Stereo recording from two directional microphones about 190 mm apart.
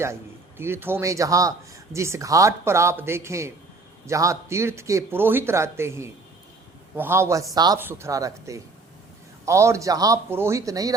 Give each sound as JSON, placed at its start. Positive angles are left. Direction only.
{"t": 0.0, "sound": "a man's voice", "side_deg": -15}